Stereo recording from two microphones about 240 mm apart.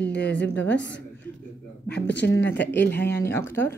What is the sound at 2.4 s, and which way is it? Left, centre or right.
Speech, centre.